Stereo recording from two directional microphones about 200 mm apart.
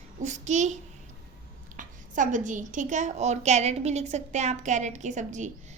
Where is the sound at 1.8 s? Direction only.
40° right (ahead or behind).